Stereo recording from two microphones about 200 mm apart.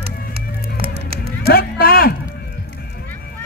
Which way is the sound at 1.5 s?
50° left (ahead or behind).